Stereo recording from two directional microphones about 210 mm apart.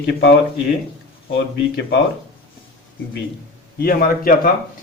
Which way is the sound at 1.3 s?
55° left (ahead or behind).